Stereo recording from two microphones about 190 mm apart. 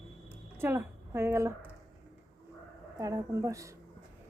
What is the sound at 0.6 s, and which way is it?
Speech, 10° right (ahead or behind).